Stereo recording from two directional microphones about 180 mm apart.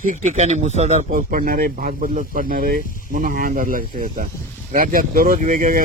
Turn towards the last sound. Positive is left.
turn(degrees=-50)  # may be behind; listen again after turning